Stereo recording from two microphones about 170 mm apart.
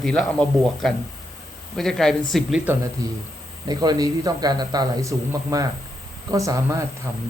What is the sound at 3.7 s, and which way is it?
A man's voice, 25° right (ahead or behind).